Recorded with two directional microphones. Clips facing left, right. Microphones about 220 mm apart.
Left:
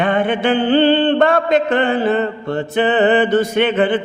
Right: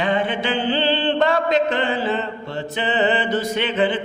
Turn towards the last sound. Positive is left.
turn(degrees=55)  # may be behind; listen again after turning